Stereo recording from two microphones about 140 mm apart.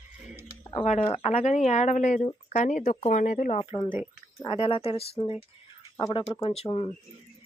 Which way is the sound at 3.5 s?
40° left (ahead or behind).